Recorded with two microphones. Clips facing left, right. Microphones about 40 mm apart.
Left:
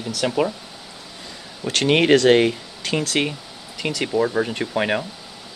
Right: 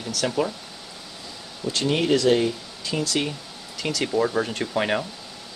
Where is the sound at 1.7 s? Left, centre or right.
Left.